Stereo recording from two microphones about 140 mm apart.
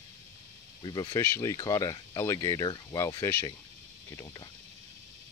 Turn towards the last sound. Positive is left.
turn(degrees=20)  # may be behind; listen again after turning